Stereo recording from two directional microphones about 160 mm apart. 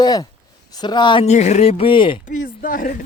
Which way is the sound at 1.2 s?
45° left (ahead or behind).